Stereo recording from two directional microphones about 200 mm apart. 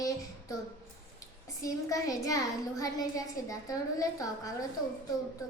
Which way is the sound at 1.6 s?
15° left (ahead or behind).